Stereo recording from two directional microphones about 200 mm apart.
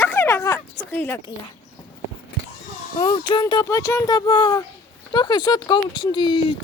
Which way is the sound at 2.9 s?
25° left (ahead or behind).